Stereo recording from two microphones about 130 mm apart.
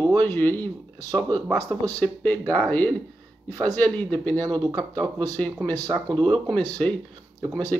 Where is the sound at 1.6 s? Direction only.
25° right (ahead or behind).